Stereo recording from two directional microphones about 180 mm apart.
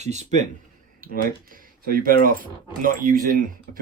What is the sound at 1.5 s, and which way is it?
Speech, 50° right (ahead or behind).